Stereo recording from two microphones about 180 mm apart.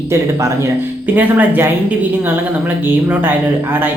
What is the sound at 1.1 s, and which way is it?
Speech, 10° right (ahead or behind).